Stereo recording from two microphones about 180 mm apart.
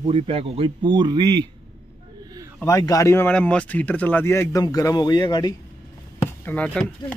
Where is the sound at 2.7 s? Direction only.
20° left (ahead or behind).